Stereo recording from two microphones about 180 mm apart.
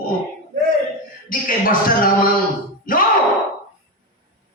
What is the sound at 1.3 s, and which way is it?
Speech, 50° left (ahead or behind).